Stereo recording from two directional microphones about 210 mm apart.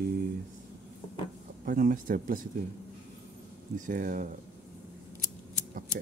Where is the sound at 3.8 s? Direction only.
40° right (ahead or behind).